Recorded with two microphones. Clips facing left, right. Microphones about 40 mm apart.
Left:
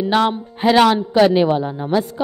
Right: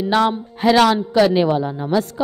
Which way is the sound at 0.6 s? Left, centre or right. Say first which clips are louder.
Left 1 dB; centre.